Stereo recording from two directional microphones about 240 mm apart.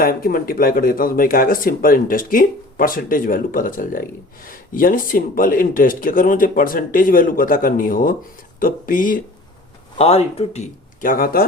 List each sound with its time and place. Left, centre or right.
0.0 s speech: left
10.0 s speech: left